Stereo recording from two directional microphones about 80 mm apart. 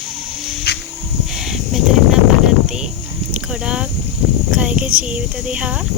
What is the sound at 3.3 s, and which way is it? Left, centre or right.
Speech, centre.